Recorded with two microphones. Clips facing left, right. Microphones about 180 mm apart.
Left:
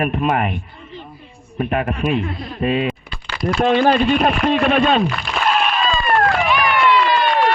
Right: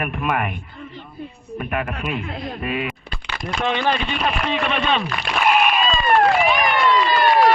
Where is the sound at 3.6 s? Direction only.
45° left (ahead or behind).